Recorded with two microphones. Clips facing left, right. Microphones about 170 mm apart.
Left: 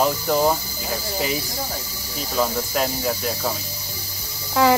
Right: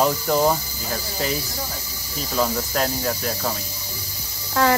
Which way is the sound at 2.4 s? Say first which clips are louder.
Even; 5° left (ahead or behind).